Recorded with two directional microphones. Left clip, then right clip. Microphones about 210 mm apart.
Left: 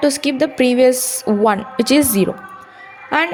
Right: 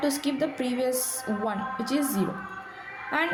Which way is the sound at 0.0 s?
35° left (ahead or behind).